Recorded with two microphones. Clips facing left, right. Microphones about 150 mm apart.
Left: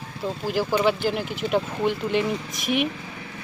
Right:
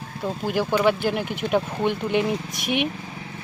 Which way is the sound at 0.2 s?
Centre (ahead or behind).